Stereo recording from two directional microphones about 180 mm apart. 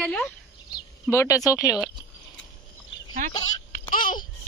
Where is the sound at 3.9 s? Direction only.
50° left (ahead or behind).